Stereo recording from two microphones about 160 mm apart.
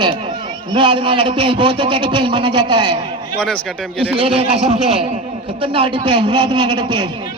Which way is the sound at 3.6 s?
5° left (ahead or behind).